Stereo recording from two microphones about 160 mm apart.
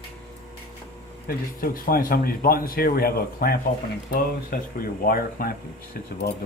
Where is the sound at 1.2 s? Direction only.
65° left (ahead or behind).